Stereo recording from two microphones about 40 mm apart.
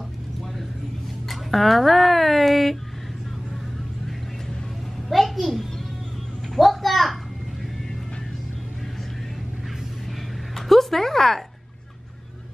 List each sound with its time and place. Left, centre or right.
1.3 s speech: centre
5.1 s a sound: centre
10.5 s music: centre